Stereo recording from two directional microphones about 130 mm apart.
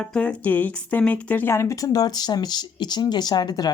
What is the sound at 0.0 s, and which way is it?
Speech, 10° left (ahead or behind).